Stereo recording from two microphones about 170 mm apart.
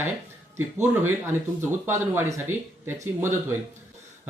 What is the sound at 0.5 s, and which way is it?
Speech, 10° right (ahead or behind).